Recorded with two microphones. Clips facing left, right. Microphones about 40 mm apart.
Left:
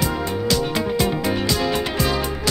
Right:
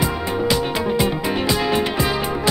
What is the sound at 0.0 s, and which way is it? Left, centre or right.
Music, centre.